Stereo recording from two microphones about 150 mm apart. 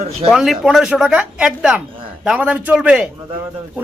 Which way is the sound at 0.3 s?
Centre (ahead or behind).